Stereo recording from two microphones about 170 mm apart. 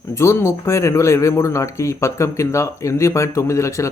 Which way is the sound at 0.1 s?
15° left (ahead or behind).